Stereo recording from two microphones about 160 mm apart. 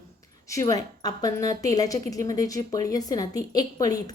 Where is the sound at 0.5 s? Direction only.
20° left (ahead or behind).